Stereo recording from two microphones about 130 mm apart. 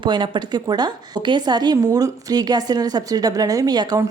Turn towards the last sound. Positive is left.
turn(degrees=-30)  # may be behind; listen again after turning